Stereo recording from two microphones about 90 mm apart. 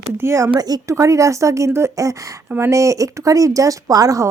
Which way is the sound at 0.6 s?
45° right (ahead or behind).